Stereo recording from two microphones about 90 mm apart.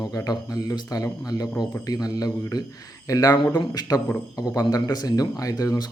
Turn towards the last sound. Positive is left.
turn(degrees=45)  # may be behind; listen again after turning